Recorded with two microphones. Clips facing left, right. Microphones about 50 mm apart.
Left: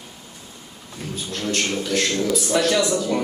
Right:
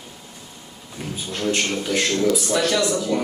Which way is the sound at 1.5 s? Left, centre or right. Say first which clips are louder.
Right 1 dB; centre.